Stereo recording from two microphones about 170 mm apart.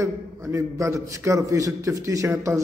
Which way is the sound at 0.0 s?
15° right (ahead or behind).